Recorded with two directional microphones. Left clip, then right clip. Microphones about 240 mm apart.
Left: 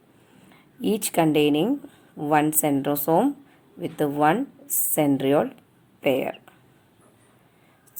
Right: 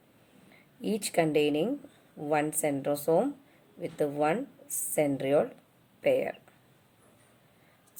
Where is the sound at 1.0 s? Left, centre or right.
Left.